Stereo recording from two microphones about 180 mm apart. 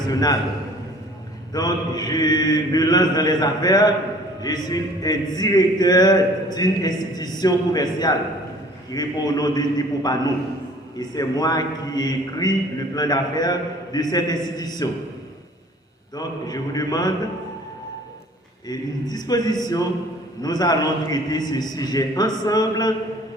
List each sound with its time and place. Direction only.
0.0 s a sound: 20° left (ahead or behind)
1.5 s speech: 20° left (ahead or behind)
16.1 s speech: 20° left (ahead or behind)
18.7 s speech: 20° left (ahead or behind)